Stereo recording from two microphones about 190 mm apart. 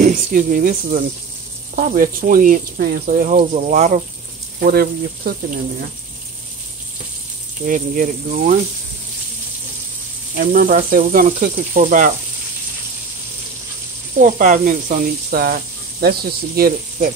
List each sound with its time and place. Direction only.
0.0 s speech: 45° right (ahead or behind)
1.8 s speech: 50° right (ahead or behind)
4.6 s speech: 55° right (ahead or behind)
7.6 s speech: 45° right (ahead or behind)
10.3 s speech: 50° right (ahead or behind)
14.2 s speech: 45° right (ahead or behind)